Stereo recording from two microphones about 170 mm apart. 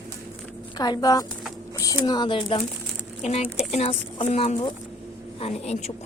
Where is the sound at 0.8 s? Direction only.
25° left (ahead or behind); by 5.9 s 40° left (ahead or behind).